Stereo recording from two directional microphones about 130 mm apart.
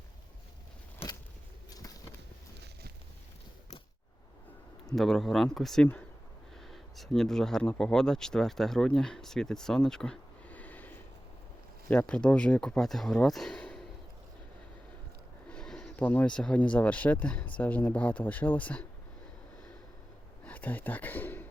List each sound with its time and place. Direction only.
1.7 s a sound: 30° left (ahead or behind)
4.9 s a man's voice: centre (ahead or behind)
15.4 s speech: 5° left (ahead or behind)
20.4 s speech: 10° left (ahead or behind)